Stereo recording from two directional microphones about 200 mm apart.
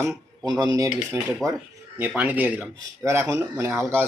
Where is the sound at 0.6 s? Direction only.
20° right (ahead or behind).